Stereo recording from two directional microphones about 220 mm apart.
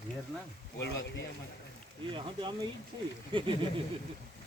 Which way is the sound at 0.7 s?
55° left (ahead or behind).